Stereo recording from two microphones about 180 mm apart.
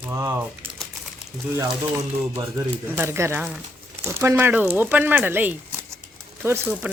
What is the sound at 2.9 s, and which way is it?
Speech, 15° right (ahead or behind).